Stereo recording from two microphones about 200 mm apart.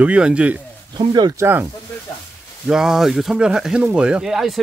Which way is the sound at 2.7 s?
5° right (ahead or behind).